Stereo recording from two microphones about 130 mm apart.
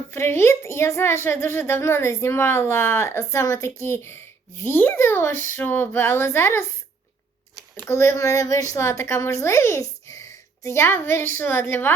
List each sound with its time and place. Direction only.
0.1 s a woman's voice: 20° left (ahead or behind)
7.9 s a woman's voice: 20° left (ahead or behind)